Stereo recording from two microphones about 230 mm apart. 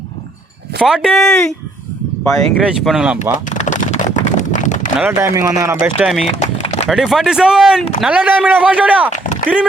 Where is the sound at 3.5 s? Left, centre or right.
Left.